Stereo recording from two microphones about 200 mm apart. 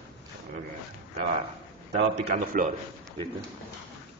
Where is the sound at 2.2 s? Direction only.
40° right (ahead or behind).